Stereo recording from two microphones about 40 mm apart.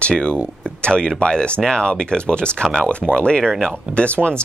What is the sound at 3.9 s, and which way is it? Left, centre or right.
Speech, left.